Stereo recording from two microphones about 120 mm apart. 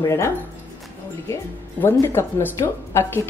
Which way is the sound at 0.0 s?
25° left (ahead or behind).